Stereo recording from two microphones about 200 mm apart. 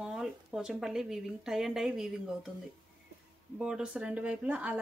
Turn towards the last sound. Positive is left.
turn(degrees=-5)  # may be behind; listen again after turning